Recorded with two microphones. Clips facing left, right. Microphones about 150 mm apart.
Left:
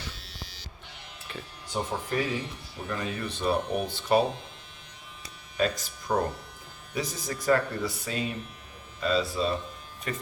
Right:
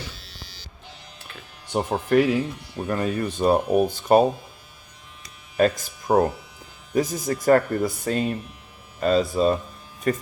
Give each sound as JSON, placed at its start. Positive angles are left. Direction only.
{"t": 0.2, "sound": "a sound", "side_deg": -35}
{"t": 1.7, "sound": "speech", "side_deg": -65}
{"t": 2.8, "sound": "speech", "side_deg": -50}
{"t": 5.5, "sound": "speech", "side_deg": -50}